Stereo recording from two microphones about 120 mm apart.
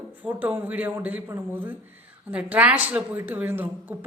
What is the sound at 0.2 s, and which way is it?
A woman's voice, 15° right (ahead or behind).